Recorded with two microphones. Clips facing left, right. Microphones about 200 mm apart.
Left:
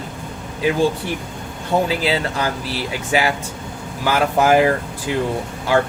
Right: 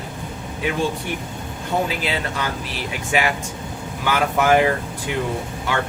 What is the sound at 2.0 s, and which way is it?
Speech, 35° left (ahead or behind).